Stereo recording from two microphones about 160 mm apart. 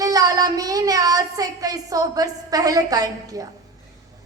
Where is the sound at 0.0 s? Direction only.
20° right (ahead or behind).